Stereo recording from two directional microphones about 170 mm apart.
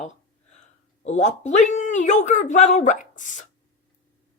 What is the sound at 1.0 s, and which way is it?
Speech, 40° left (ahead or behind).